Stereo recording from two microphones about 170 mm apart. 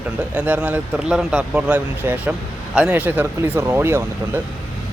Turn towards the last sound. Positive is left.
turn(degrees=-15)  # may be behind; listen again after turning